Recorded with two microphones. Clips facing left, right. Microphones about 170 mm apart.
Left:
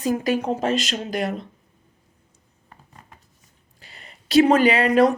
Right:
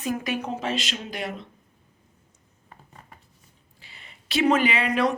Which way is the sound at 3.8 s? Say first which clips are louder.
Left 4 dB; 40° left (ahead or behind).